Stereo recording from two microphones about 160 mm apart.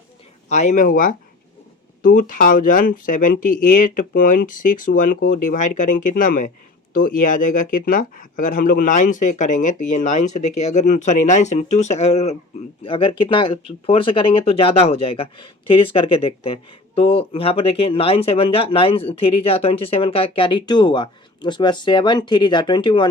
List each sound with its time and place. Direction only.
0.4 s speech: 45° left (ahead or behind); by 23.0 s 30° left (ahead or behind)